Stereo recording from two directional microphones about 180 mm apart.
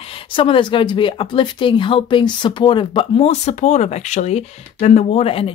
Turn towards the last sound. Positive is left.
turn(degrees=30)  # may be behind; listen again after turning